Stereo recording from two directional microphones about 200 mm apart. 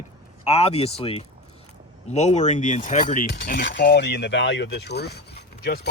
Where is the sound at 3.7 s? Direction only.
60° left (ahead or behind).